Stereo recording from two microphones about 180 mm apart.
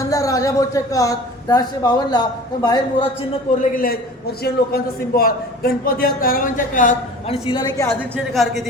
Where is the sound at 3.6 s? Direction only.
55° left (ahead or behind); by 7.9 s 20° left (ahead or behind).